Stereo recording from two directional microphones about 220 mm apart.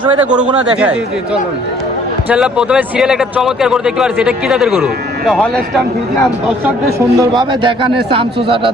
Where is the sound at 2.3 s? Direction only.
5° right (ahead or behind).